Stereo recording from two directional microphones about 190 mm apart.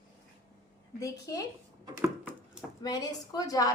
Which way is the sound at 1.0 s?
15° left (ahead or behind).